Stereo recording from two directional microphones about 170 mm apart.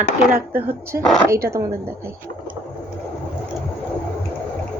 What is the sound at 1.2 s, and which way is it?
Speech, 15° right (ahead or behind).